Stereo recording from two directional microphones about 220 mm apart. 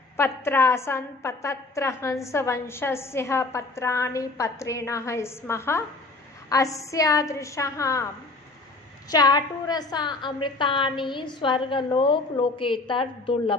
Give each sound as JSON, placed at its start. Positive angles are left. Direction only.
{"t": 0.2, "sound": "a woman's voice", "side_deg": 10}
{"t": 9.0, "sound": "a woman's voice", "side_deg": 15}